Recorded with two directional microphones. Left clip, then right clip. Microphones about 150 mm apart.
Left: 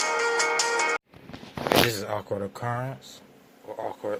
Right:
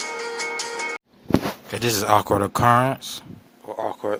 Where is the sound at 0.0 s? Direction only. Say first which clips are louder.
Left 4 dB; 40° left (ahead or behind).